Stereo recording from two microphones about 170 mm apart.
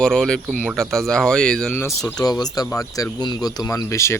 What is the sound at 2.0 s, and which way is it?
Speech, 20° left (ahead or behind).